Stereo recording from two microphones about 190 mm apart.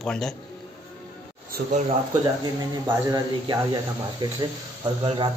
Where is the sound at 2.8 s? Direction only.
15° right (ahead or behind).